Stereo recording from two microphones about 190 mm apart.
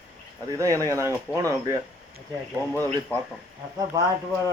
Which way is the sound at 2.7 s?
10° left (ahead or behind).